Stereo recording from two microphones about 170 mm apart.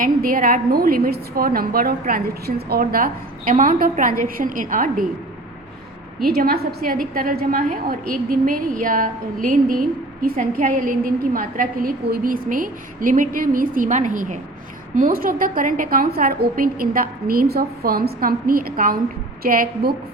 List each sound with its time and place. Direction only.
0.0 s a woman's voice: 55° right (ahead or behind)
6.2 s a woman's voice: 60° right (ahead or behind)